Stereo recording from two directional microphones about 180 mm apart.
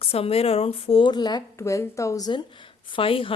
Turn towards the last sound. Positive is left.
turn(degrees=30)  # may be behind; listen again after turning